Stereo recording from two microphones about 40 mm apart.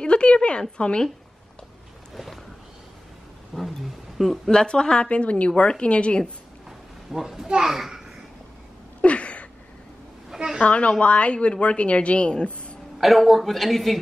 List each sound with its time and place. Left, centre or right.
0.0 s a woman's voice: left
3.5 s a sound: centre
4.5 s a woman's voice: left
5.1 s a woman's voice: left
7.1 s a child's voice: centre
9.0 s a sound: left
10.3 s a sound: centre
10.6 s a woman's voice: left
13.0 s a woman's voice: centre